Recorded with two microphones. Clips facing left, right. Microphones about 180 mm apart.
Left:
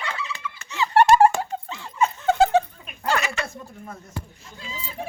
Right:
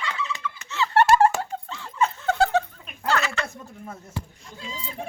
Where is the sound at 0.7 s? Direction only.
15° left (ahead or behind).